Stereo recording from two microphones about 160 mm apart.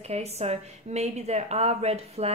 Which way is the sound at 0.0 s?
40° right (ahead or behind).